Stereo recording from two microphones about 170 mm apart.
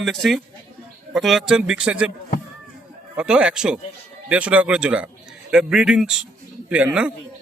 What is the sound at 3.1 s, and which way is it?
A man's voice, 5° right (ahead or behind).